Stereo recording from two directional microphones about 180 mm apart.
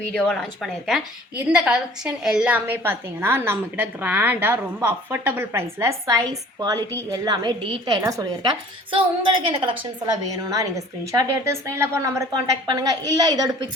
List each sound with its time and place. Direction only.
0.1 s a woman's voice: 5° left (ahead or behind); by 13.7 s 20° right (ahead or behind)